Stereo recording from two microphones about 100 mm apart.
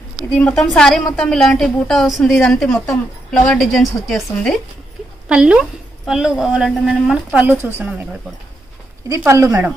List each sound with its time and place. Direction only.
0.4 s a woman's voice: 10° left (ahead or behind)
5.3 s a woman's voice: 10° right (ahead or behind)
7.3 s speech: 20° right (ahead or behind)
9.3 s speech: 30° right (ahead or behind)